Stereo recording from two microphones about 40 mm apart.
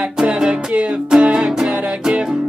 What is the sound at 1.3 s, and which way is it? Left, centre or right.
Music, centre.